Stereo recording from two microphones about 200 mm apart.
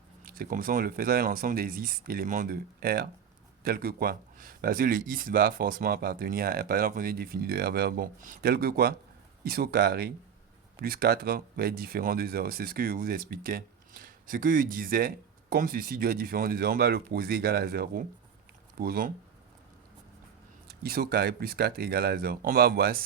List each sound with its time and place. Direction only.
0.3 s speech: 45° right (ahead or behind)
20.8 s speech: 50° right (ahead or behind)